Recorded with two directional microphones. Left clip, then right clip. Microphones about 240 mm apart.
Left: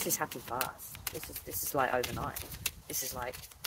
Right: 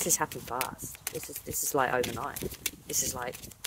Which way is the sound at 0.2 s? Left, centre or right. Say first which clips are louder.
Right 4 dB; right.